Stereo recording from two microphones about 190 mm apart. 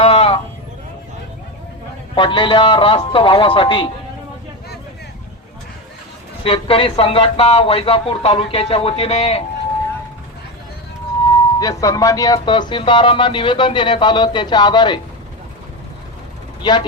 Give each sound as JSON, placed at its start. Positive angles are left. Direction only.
{"t": 0.0, "sound": "sheep", "side_deg": 30}
{"t": 2.1, "sound": "speech", "side_deg": 25}
{"t": 6.4, "sound": "speech", "side_deg": 30}
{"t": 11.6, "sound": "speech", "side_deg": 15}
{"t": 16.6, "sound": "speech", "side_deg": 25}